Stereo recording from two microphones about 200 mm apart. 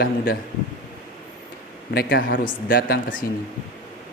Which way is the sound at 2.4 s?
50° left (ahead or behind).